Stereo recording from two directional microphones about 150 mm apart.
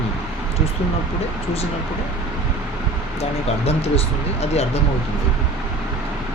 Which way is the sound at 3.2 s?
45° left (ahead or behind).